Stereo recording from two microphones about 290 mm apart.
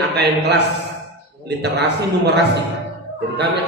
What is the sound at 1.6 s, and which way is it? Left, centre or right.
Speech, right.